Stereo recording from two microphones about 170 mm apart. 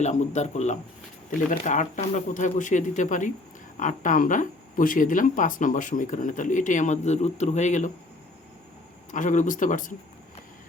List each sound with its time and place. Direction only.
0.0 s speech: 45° left (ahead or behind)
9.1 s speech: 50° left (ahead or behind)